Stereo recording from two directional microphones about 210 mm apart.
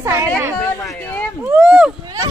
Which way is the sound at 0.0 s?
15° right (ahead or behind).